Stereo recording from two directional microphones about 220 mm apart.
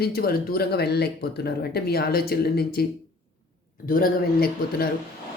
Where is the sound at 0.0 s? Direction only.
45° left (ahead or behind).